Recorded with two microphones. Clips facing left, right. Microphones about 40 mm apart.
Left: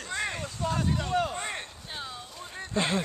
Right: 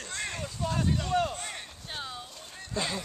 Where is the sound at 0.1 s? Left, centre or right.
Centre.